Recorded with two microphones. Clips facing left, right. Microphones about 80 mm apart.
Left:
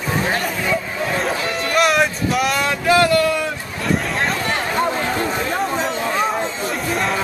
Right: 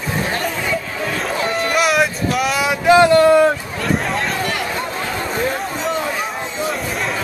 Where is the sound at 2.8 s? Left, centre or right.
Right.